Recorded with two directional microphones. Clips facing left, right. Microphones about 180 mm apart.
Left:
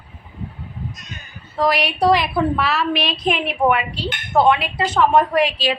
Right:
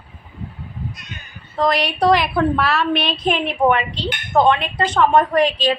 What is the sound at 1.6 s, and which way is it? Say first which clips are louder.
A woman's voice: even; centre (ahead or behind).